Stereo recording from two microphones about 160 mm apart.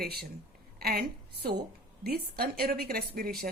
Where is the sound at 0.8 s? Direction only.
70° right (ahead or behind).